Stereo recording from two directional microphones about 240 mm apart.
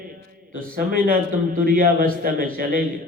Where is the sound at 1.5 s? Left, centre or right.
Right.